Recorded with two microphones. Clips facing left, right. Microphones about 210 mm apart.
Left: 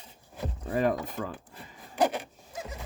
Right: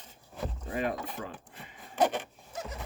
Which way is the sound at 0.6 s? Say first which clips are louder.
Left 6 dB; 40° left (ahead or behind).